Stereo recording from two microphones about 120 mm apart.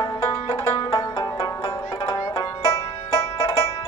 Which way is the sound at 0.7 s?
35° left (ahead or behind).